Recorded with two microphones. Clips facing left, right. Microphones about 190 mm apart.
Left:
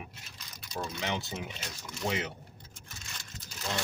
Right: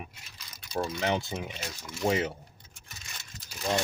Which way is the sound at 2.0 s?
30° right (ahead or behind).